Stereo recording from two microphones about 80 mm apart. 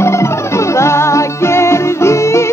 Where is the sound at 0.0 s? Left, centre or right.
Left.